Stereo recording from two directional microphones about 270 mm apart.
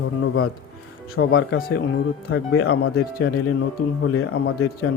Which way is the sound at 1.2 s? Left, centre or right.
Left.